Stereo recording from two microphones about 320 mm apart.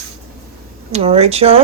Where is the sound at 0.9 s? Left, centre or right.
Centre.